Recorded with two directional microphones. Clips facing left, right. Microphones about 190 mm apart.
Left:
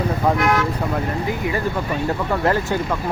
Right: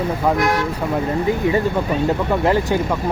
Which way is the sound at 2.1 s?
15° right (ahead or behind).